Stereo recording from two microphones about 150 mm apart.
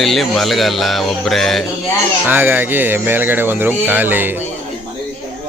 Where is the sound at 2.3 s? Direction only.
15° right (ahead or behind).